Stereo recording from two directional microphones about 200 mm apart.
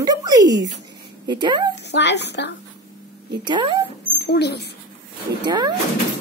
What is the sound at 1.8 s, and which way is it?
Speech, 60° left (ahead or behind).